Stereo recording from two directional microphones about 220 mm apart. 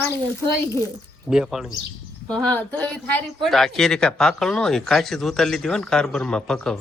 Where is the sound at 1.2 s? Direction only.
Centre (ahead or behind).